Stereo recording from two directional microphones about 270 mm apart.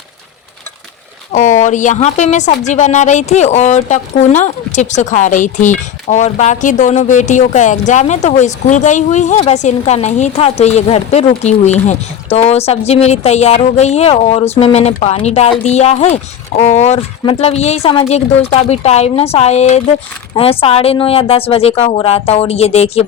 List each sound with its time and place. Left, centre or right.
1.3 s speech: left